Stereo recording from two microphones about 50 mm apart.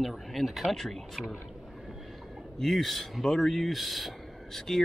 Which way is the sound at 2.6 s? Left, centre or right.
Centre.